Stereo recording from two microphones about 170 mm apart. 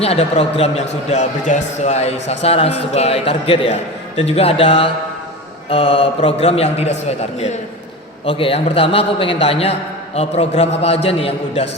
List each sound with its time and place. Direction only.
0.0 s a man's voice: 35° left (ahead or behind)
8.2 s a man's voice: 35° left (ahead or behind)